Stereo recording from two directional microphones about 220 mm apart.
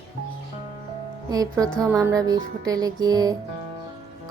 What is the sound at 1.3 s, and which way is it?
Music, 15° right (ahead or behind).